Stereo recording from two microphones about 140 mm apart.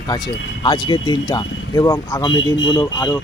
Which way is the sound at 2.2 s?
30° left (ahead or behind).